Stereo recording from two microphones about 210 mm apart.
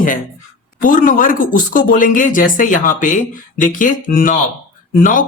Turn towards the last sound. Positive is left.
turn(degrees=40)  # may be behind; listen again after turning